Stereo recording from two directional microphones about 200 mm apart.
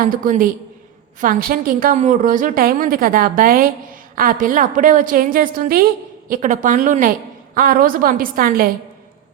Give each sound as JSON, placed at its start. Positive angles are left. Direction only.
{"t": 0.0, "sound": "a woman's voice", "side_deg": -45}